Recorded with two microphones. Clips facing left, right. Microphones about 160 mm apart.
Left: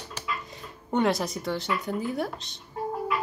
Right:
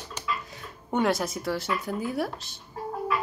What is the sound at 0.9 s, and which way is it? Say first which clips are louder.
Speech: even; centre (ahead or behind).